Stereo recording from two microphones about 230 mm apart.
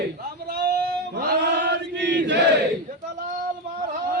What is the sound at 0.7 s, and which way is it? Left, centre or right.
Chant, right.